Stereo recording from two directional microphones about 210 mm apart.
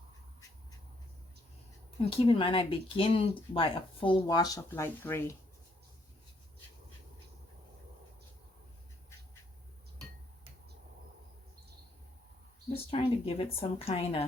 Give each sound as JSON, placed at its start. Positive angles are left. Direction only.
{"t": 2.1, "sound": "speech", "side_deg": 25}
{"t": 12.7, "sound": "speech", "side_deg": 25}